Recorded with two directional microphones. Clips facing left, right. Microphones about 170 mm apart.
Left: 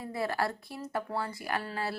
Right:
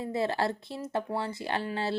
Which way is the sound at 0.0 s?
25° right (ahead or behind).